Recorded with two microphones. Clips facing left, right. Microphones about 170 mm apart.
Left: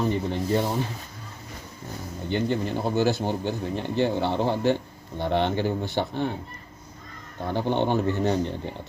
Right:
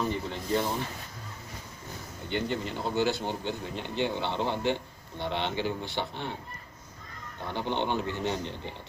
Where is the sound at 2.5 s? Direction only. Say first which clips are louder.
Left 5 dB; 55° left (ahead or behind).